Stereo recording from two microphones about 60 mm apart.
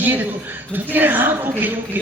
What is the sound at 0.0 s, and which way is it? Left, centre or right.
A man's voice, right.